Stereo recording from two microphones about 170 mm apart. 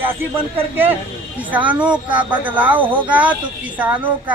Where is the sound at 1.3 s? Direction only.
10° right (ahead or behind).